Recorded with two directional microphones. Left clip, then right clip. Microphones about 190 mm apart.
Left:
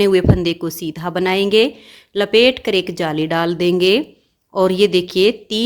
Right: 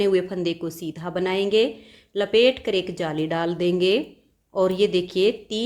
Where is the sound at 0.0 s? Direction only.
35° left (ahead or behind).